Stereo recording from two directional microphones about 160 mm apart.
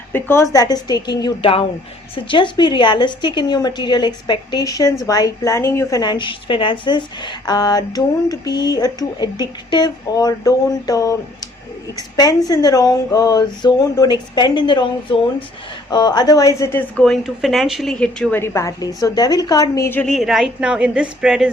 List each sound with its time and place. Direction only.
0.1 s a woman's voice: 15° left (ahead or behind)
17.0 s a woman's voice: centre (ahead or behind)
20.1 s a woman's voice: centre (ahead or behind)